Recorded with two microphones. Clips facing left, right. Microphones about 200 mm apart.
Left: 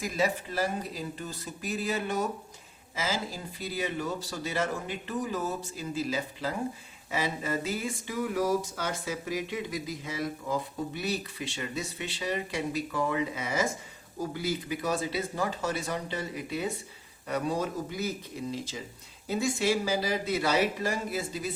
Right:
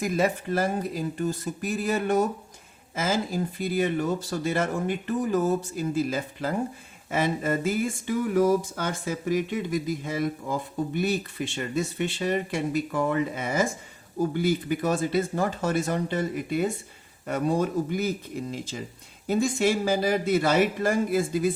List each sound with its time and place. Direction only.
0.0 s speech: 50° right (ahead or behind)